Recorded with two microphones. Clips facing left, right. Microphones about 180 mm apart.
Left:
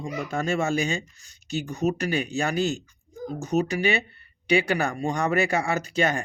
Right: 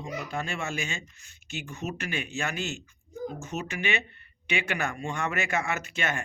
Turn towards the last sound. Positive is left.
turn(degrees=35)  # may be behind; listen again after turning